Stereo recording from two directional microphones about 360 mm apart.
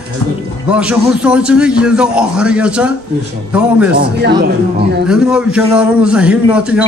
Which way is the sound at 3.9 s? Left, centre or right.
Right.